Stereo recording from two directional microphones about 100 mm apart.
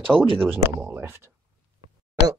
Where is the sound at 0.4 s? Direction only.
20° right (ahead or behind).